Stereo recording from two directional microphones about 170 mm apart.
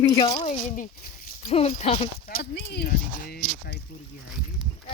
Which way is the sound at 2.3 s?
75° left (ahead or behind).